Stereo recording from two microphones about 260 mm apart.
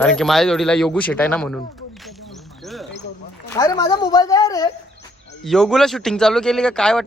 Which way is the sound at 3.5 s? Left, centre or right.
Centre.